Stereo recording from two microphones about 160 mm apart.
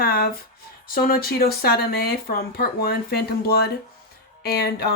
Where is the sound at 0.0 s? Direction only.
70° left (ahead or behind).